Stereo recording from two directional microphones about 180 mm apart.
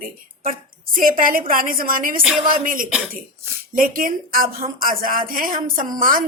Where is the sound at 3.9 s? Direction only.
55° right (ahead or behind).